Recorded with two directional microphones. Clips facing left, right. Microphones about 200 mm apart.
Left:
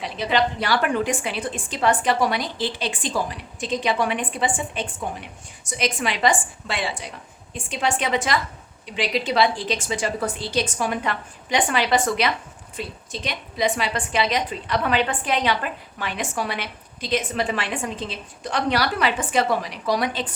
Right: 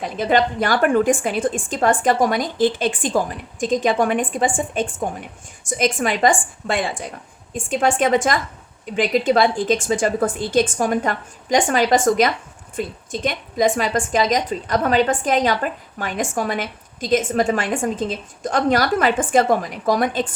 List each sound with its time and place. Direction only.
0.0 s a woman's voice: 50° right (ahead or behind)